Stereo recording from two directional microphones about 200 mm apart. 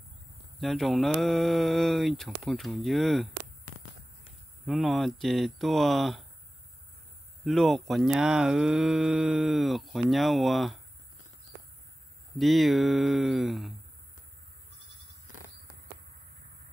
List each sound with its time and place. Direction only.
0.6 s speech: centre (ahead or behind)
4.6 s speech: centre (ahead or behind)
7.4 s speech: centre (ahead or behind)
12.4 s speech: centre (ahead or behind)